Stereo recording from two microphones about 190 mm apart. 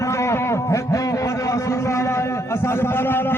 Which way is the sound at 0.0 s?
15° left (ahead or behind).